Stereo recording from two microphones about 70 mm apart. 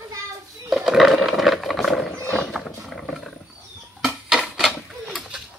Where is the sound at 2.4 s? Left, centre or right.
Centre.